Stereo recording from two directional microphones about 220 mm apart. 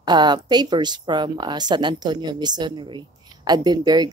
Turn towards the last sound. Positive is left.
turn(degrees=-20)  # may be behind; listen again after turning